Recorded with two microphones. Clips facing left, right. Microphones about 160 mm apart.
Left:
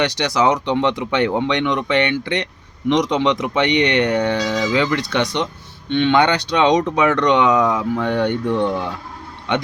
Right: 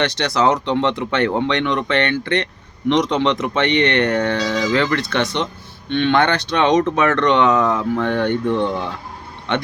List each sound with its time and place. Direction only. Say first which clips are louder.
0.0 s speech: even; 15° left (ahead or behind)